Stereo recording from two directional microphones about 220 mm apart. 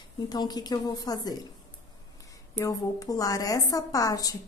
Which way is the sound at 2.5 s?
15° left (ahead or behind).